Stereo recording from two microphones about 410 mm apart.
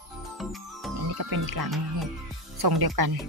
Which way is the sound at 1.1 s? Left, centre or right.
Right.